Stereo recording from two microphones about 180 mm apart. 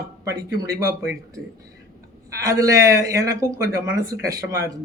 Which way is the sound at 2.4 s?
20° right (ahead or behind).